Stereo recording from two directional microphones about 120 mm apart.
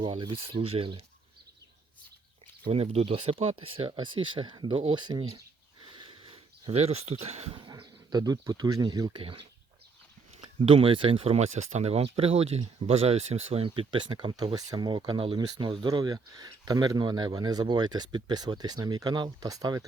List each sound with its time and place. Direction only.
0.0 s speech: 45° right (ahead or behind)
2.6 s speech: 55° right (ahead or behind)
5.8 s a sound: 45° right (ahead or behind); by 7.5 s 60° right (ahead or behind)
7.5 s speech: 40° right (ahead or behind)
10.3 s speech: 55° right (ahead or behind); by 19.8 s 30° right (ahead or behind)